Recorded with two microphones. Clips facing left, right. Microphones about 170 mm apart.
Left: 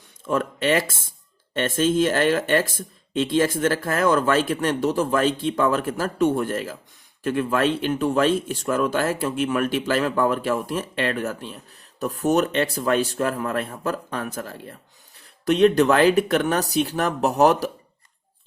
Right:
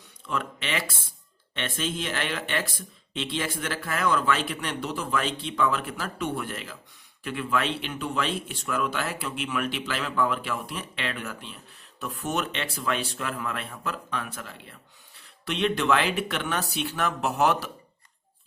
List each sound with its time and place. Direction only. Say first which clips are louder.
0.3 s speech: left 10 dB; 45° left (ahead or behind)